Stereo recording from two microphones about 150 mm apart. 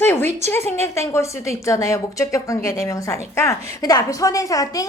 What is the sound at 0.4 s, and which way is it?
A woman's voice, 15° left (ahead or behind).